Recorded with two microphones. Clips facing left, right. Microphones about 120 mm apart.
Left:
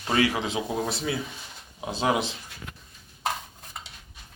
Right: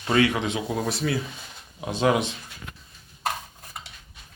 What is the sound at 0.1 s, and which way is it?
Speech, 30° left (ahead or behind).